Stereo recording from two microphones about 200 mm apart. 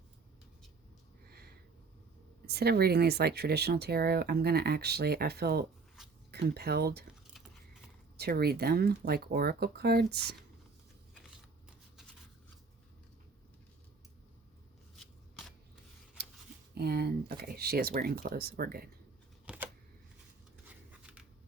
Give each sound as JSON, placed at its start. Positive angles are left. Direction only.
{"t": 2.5, "sound": "speech", "side_deg": -55}
{"t": 6.0, "sound": "a sound", "side_deg": 0}
{"t": 6.3, "sound": "speech", "side_deg": -55}
{"t": 8.1, "sound": "speech", "side_deg": -50}
{"t": 14.9, "sound": "scissors", "side_deg": 0}
{"t": 16.7, "sound": "speech", "side_deg": -50}
{"t": 19.5, "sound": "typewriter", "side_deg": -5}
{"t": 21.0, "sound": "a sound", "side_deg": -5}